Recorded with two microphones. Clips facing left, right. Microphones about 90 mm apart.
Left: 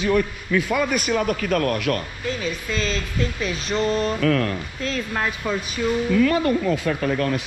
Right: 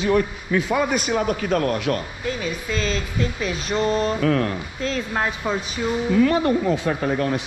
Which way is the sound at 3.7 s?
20° right (ahead or behind).